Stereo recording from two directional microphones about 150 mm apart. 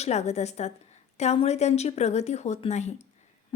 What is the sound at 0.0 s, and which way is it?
A woman's voice, 45° left (ahead or behind).